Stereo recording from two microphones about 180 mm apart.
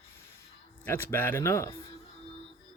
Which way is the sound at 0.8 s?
10° left (ahead or behind).